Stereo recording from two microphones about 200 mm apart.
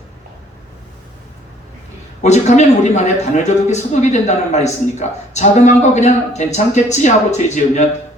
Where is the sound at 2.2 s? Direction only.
35° left (ahead or behind).